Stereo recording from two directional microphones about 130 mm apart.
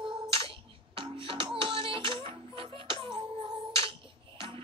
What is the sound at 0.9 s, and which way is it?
Music, 40° right (ahead or behind).